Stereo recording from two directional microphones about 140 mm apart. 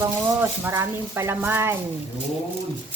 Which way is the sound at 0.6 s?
20° right (ahead or behind).